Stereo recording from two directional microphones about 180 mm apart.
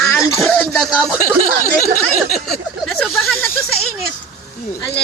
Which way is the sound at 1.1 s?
50° left (ahead or behind).